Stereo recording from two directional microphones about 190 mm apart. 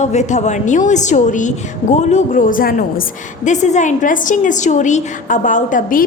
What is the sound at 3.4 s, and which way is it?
A woman's voice, 40° left (ahead or behind).